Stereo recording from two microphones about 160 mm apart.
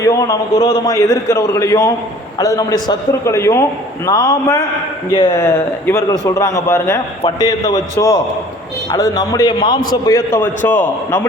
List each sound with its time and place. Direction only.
0.0 s a man's voice: 20° left (ahead or behind)